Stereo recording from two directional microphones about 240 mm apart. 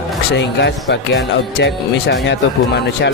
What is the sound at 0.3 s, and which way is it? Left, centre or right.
Speech, left.